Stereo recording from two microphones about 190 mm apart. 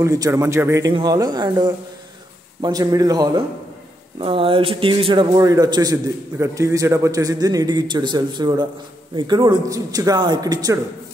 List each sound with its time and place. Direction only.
0.0 s a man's voice: 15° right (ahead or behind)